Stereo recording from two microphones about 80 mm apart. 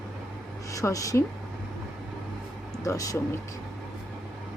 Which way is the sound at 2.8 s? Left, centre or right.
Left.